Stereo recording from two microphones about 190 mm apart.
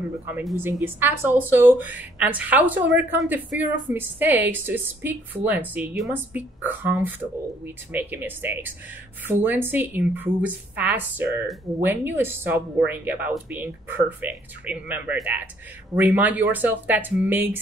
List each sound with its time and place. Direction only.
0.6 s speech: 10° right (ahead or behind)